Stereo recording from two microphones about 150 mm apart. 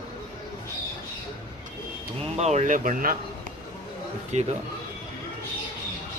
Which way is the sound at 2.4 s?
50° right (ahead or behind).